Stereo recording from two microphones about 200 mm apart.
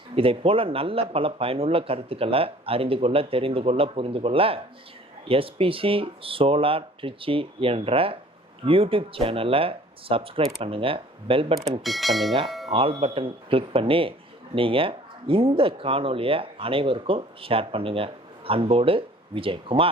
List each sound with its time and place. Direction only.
0.2 s speech: 30° right (ahead or behind)
11.8 s speech: centre (ahead or behind)
12.5 s music: centre (ahead or behind)
12.7 s speech: 25° right (ahead or behind)